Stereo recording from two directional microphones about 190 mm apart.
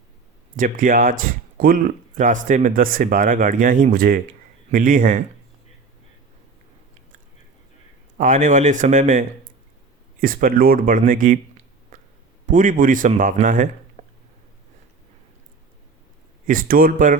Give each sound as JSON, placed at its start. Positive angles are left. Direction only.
{"t": 0.5, "sound": "speech", "side_deg": -45}
{"t": 8.2, "sound": "speech", "side_deg": -40}
{"t": 14.0, "sound": "a sound", "side_deg": -40}
{"t": 16.5, "sound": "speech", "side_deg": -45}